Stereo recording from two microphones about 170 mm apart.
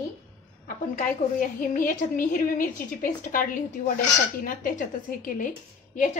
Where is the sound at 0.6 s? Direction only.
55° left (ahead or behind).